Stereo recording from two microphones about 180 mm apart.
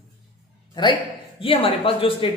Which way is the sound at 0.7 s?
25° left (ahead or behind).